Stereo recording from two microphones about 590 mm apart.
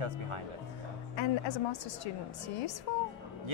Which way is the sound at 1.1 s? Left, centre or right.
Left.